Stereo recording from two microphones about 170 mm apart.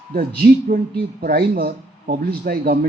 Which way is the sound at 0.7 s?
65° right (ahead or behind).